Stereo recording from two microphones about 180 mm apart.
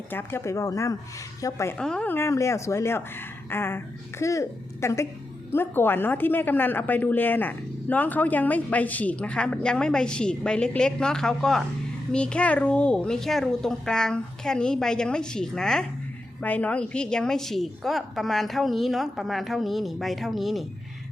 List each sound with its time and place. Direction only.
0.1 s a woman's voice: 10° left (ahead or behind)
1.8 s a woman's voice: 5° left (ahead or behind)